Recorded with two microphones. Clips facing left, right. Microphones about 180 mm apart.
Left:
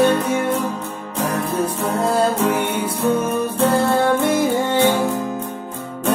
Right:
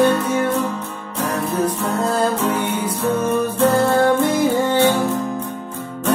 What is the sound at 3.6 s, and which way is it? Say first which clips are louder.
Music: right 1 dB; 25° left (ahead or behind).